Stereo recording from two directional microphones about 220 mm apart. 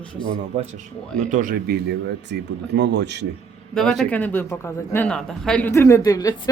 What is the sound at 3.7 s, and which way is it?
A man's voice, centre (ahead or behind).